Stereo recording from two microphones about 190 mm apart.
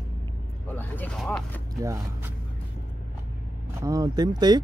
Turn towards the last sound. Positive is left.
turn(degrees=-20)  # may be behind; listen again after turning